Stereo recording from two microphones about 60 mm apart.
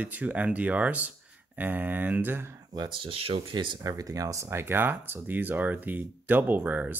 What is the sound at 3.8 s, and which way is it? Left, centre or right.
Speech, right.